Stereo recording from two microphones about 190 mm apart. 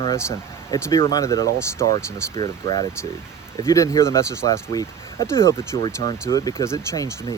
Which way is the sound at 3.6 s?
15° left (ahead or behind).